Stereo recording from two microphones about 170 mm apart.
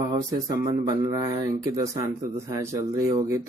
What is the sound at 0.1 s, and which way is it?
Speech, 25° right (ahead or behind).